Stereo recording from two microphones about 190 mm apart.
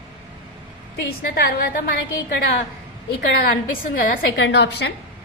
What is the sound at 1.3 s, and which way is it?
Speech, 55° left (ahead or behind).